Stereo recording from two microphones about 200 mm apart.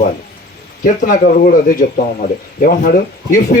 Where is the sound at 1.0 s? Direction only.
40° left (ahead or behind).